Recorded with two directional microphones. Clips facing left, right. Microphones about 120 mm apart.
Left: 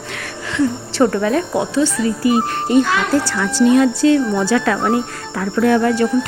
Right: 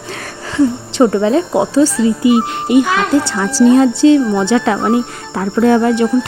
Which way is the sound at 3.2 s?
30° right (ahead or behind).